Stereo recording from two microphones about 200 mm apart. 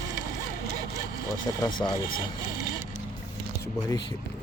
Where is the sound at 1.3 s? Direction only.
20° left (ahead or behind).